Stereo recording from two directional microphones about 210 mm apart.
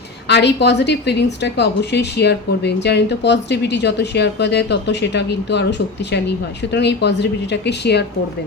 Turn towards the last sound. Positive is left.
turn(degrees=55)  # may be behind; listen again after turning